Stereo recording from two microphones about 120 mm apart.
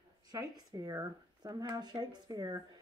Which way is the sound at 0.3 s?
30° right (ahead or behind).